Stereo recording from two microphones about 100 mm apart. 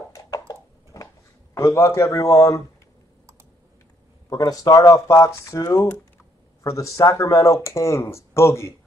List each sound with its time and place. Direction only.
0.1 s a sound: 35° left (ahead or behind)
1.5 s speech: 30° left (ahead or behind)
4.3 s speech: 40° left (ahead or behind)